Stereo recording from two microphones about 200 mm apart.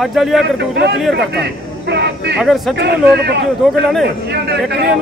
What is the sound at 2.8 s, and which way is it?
Speech, 55° right (ahead or behind).